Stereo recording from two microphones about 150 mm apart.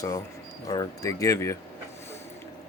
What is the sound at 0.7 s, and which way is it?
Speech, 25° left (ahead or behind).